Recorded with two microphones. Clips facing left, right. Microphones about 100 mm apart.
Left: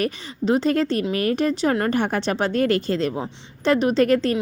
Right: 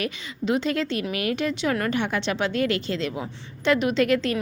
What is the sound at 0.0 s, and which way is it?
A woman's voice, 35° left (ahead or behind).